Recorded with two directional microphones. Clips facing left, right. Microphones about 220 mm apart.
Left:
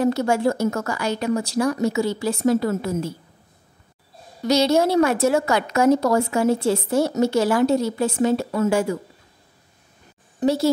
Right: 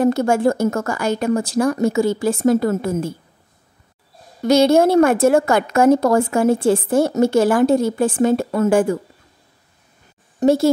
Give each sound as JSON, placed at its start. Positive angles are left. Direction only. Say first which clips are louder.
{"t": 0.0, "sound": "a woman's voice", "louder": "right 4 dB", "side_deg": -50}
{"t": 4.5, "sound": "a woman's voice", "louder": "right 5 dB", "side_deg": -50}
{"t": 10.4, "sound": "a woman's voice", "louder": "right 5 dB", "side_deg": -50}